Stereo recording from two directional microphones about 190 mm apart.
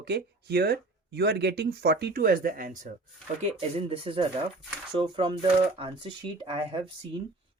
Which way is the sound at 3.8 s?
30° right (ahead or behind).